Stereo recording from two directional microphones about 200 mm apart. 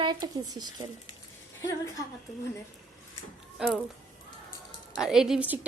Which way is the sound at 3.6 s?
Centre (ahead or behind).